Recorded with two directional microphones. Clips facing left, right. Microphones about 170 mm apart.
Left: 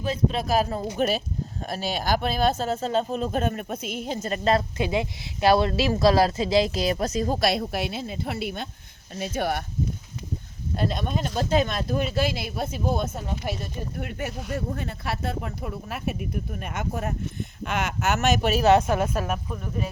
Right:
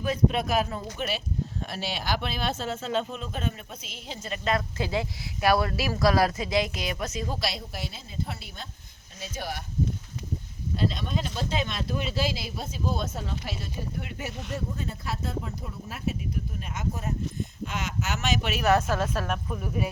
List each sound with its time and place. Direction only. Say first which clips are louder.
0.0 s speech: even; 30° left (ahead or behind)
4.8 s speech: left 4 dB; 20° left (ahead or behind); by 7.3 s 40° left (ahead or behind)
7.4 s speech: left 9 dB; 60° left (ahead or behind)
10.8 s speech: left 2 dB; 55° left (ahead or behind)
14.5 s speech: left 1 dB; 65° left (ahead or behind); by 18.6 s 45° left (ahead or behind)
18.6 s a woman's voice: left 3 dB; 20° left (ahead or behind)
19.5 s speech: right 1 dB; 5° right (ahead or behind)